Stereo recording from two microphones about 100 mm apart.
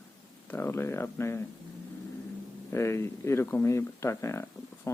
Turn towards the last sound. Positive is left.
turn(degrees=25)  # may be behind; listen again after turning